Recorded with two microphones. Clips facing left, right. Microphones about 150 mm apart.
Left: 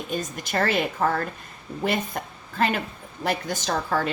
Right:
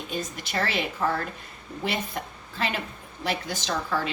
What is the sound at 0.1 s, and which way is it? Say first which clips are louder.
A woman's voice: left 3 dB; 50° left (ahead or behind).